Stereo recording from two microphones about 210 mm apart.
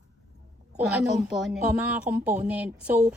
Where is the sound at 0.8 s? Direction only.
Centre (ahead or behind).